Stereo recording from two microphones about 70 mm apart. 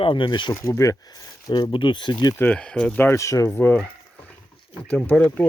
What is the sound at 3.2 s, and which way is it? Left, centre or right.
Speech, left.